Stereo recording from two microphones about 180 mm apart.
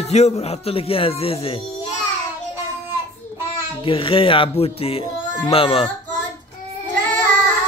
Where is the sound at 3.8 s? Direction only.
30° left (ahead or behind).